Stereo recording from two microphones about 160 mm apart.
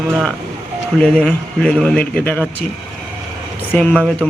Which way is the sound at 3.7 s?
5° left (ahead or behind).